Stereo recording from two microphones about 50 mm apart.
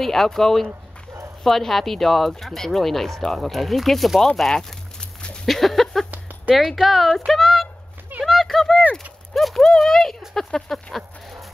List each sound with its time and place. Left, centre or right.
0.0 s speech: centre
5.0 s a sound: centre
5.5 s speech: centre